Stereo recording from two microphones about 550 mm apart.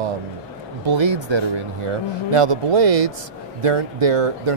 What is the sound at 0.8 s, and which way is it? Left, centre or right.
Speech, right.